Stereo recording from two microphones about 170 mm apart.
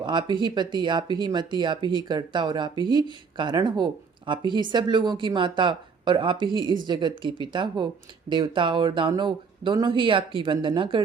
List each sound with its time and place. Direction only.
0.0 s speech: 25° right (ahead or behind)